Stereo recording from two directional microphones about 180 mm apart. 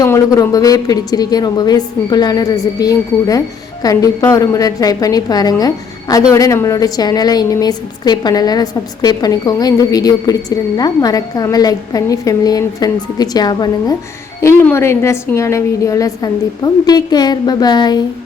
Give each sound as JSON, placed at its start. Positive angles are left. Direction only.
{"t": 0.0, "sound": "a woman's voice", "side_deg": 20}